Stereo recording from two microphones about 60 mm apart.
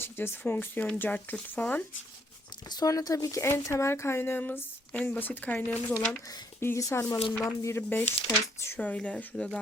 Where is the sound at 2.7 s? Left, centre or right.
Left.